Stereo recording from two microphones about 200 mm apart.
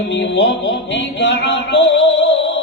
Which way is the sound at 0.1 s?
65° left (ahead or behind).